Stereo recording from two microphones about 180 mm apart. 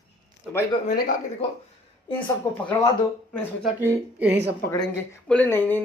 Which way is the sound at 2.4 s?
10° left (ahead or behind).